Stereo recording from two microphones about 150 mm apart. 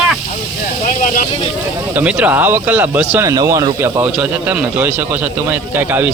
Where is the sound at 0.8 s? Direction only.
65° left (ahead or behind).